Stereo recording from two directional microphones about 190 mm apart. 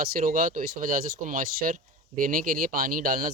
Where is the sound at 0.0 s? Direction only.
50° right (ahead or behind).